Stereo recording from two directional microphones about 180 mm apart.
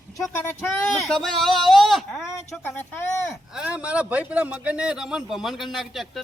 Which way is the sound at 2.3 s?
10° left (ahead or behind).